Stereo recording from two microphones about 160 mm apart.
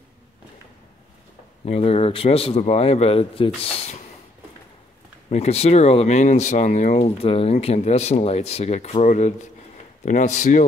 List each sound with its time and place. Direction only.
1.7 s speech: 40° left (ahead or behind)
5.3 s speech: 40° left (ahead or behind)